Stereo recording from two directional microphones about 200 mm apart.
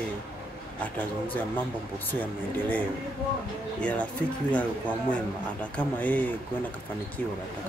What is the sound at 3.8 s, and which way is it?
Speech, 5° left (ahead or behind).